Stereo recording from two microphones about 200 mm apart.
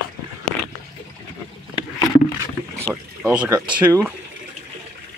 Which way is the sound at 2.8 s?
5° right (ahead or behind).